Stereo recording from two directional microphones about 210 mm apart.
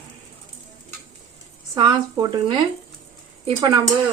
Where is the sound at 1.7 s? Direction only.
20° right (ahead or behind).